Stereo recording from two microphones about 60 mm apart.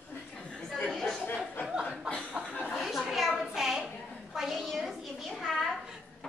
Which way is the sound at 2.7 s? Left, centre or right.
Centre.